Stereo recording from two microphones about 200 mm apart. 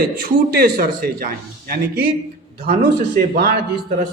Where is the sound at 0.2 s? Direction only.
50° right (ahead or behind).